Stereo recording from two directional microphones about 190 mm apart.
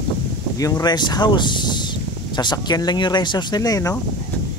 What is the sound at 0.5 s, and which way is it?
Speech, 20° left (ahead or behind).